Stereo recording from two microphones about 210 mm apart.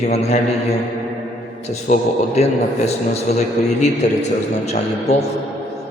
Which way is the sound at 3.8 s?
35° left (ahead or behind).